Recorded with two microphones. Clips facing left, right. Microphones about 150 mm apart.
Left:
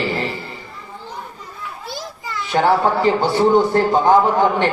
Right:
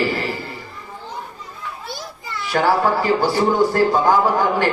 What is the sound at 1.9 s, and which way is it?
Children playing, 90° left.